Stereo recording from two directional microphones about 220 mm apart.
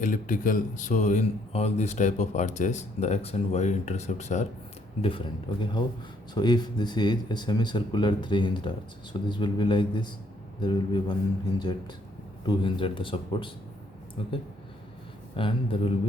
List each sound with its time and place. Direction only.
0.0 s speech: 35° left (ahead or behind); by 11.2 s 20° left (ahead or behind)
12.5 s speech: 20° left (ahead or behind)
15.4 s speech: 25° left (ahead or behind)